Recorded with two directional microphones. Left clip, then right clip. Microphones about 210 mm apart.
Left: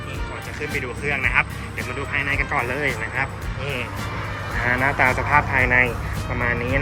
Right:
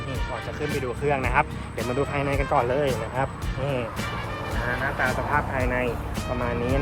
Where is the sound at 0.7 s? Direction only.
15° right (ahead or behind).